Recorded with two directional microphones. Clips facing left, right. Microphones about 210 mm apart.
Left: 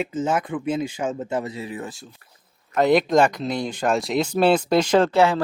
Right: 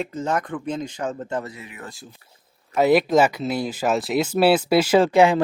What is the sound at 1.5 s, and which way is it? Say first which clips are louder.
Speech: left 8 dB; 30° left (ahead or behind).